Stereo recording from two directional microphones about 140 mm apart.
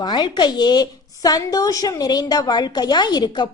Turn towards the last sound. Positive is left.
turn(degrees=30)  # may be behind; listen again after turning